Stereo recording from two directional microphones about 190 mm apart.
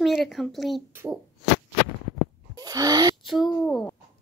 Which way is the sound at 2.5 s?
20° right (ahead or behind).